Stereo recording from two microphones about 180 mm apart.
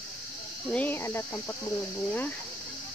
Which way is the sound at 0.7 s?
10° left (ahead or behind).